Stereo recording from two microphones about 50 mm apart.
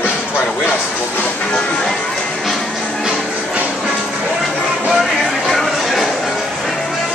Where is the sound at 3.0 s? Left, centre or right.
Centre.